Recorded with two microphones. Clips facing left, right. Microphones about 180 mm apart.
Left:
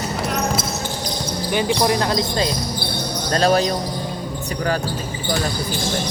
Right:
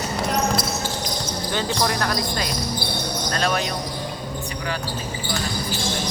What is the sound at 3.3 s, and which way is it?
Speech, 35° left (ahead or behind).